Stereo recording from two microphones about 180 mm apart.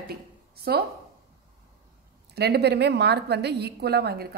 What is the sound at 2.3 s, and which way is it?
A woman's voice, 65° right (ahead or behind).